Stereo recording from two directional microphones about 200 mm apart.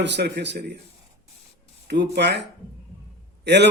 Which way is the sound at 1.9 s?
60° right (ahead or behind).